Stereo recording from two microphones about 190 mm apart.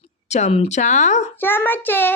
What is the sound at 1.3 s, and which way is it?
Speech, 10° left (ahead or behind).